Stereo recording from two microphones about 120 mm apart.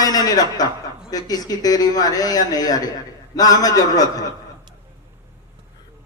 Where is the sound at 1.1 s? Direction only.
30° left (ahead or behind).